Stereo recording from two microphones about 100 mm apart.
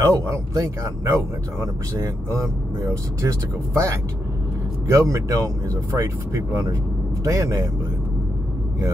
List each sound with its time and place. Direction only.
0.0 s speech: 30° right (ahead or behind)
7.2 s speech: 35° right (ahead or behind)